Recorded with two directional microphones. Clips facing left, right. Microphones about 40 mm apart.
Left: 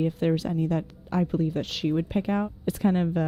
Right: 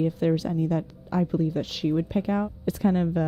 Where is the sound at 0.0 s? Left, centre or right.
Left.